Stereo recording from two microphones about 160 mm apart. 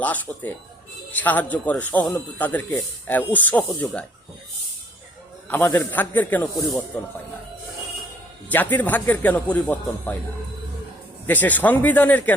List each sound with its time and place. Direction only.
0.0 s a man's voice: 10° left (ahead or behind)
5.5 s a man's voice: 10° left (ahead or behind)
6.6 s speech: centre (ahead or behind)
8.4 s a man's voice: 10° left (ahead or behind)
11.3 s a man's voice: 10° left (ahead or behind)